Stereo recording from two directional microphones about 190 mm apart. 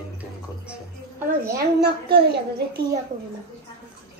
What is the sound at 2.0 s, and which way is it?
Speech, 60° right (ahead or behind).